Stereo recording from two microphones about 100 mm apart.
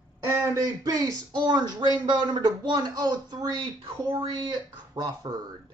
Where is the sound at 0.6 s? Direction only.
40° right (ahead or behind).